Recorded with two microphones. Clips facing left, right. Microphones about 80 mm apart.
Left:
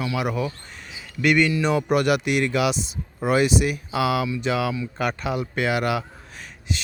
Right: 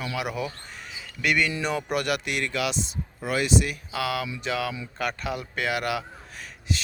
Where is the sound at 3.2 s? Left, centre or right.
Left.